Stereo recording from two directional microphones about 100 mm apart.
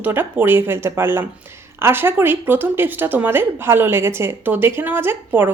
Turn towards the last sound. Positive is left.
turn(degrees=-20)  # may be behind; listen again after turning